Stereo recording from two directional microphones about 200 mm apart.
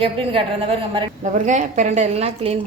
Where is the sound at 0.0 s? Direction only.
25° right (ahead or behind).